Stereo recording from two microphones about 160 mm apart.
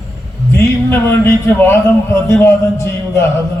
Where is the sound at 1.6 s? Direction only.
15° left (ahead or behind).